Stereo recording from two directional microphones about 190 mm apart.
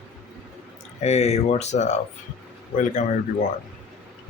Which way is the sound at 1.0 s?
35° left (ahead or behind).